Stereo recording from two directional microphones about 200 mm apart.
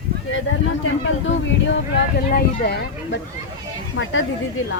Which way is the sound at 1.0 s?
65° left (ahead or behind).